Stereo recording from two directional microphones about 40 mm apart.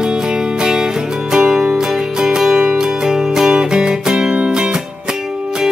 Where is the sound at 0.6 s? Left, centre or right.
Centre.